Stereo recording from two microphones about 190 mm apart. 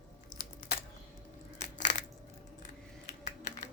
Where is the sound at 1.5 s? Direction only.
40° left (ahead or behind).